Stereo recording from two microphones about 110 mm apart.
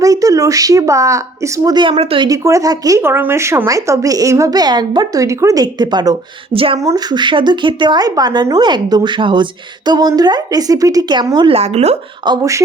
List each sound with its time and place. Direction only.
0.0 s speech: 30° right (ahead or behind)
1.7 s speech: 45° right (ahead or behind)
2.0 s speech: 60° right (ahead or behind)
2.2 s a woman's voice: 30° right (ahead or behind)
3.0 s a woman's voice: 20° right (ahead or behind); by 6.1 s 40° right (ahead or behind)
6.5 s speech: 55° right (ahead or behind)
6.7 s a woman's voice: 35° right (ahead or behind)
11.5 s speech: 75° right (ahead or behind)
12.2 s a woman's voice: 40° right (ahead or behind)